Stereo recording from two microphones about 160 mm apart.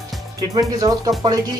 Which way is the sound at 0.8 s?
20° right (ahead or behind).